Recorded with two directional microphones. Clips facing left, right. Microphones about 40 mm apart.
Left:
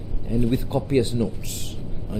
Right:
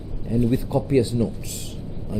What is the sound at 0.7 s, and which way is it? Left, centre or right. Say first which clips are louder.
Speech: right 1 dB; left.